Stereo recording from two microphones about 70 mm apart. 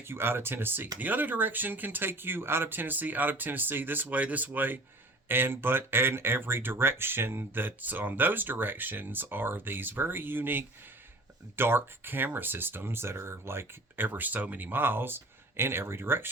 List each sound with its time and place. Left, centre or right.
0.0 s speech: right